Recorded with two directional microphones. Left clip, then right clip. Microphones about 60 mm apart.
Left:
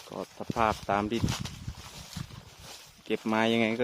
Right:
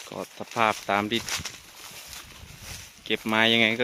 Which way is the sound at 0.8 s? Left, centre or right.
Centre.